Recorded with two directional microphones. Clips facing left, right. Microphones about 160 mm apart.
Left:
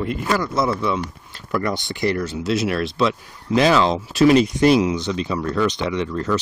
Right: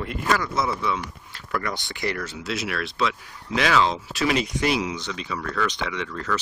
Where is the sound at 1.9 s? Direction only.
30° left (ahead or behind).